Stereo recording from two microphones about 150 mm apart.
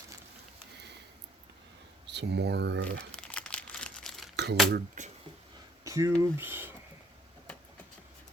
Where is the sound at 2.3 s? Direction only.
90° right.